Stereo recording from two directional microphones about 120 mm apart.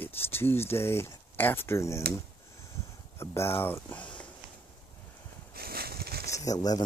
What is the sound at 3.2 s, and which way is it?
Speech, 20° left (ahead or behind).